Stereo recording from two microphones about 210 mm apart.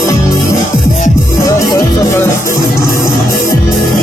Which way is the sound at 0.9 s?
45° left (ahead or behind).